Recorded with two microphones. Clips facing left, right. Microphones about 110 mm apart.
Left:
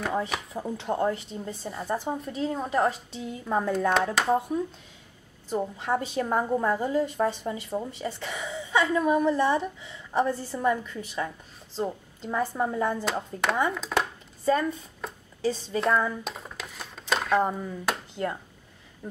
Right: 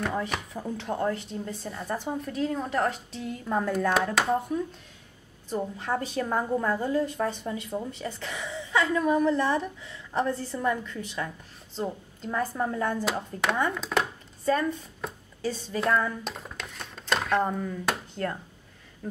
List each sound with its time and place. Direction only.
0.0 s a woman's voice: centre (ahead or behind)